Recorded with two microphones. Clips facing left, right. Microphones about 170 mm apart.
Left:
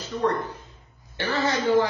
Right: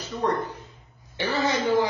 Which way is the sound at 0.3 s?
15° right (ahead or behind).